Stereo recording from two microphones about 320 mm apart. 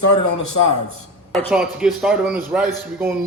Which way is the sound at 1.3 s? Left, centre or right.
Centre.